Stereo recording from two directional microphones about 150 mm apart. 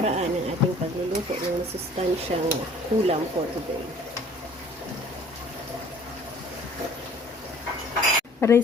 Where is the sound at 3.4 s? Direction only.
35° right (ahead or behind).